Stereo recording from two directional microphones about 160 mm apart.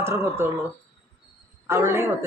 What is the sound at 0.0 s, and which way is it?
Speech, 15° right (ahead or behind).